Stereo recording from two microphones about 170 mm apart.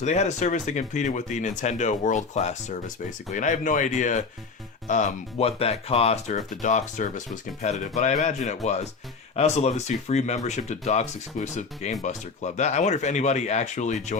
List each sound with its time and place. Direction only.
0.0 s speech: 45° left (ahead or behind)